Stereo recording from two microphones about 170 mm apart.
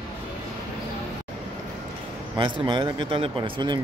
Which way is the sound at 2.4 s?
30° right (ahead or behind).